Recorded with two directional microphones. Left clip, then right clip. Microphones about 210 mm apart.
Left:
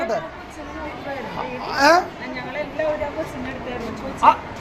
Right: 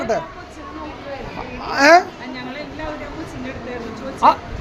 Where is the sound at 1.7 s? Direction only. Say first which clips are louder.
Right 4 dB; 45° right (ahead or behind).